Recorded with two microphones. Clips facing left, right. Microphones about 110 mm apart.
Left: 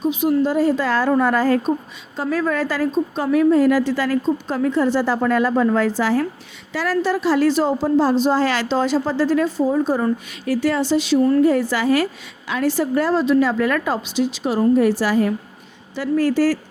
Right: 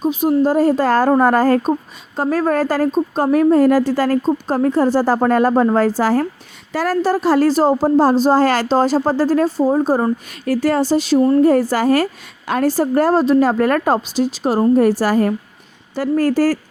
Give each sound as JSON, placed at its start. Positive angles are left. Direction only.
{"t": 0.0, "sound": "a woman's voice", "side_deg": -40}